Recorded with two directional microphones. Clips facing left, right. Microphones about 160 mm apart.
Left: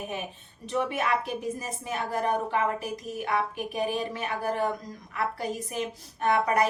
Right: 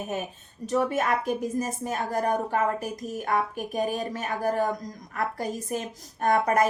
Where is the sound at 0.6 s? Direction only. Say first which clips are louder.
Right 3 dB; 40° right (ahead or behind).